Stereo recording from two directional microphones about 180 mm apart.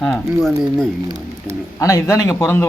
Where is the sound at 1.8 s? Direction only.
20° left (ahead or behind).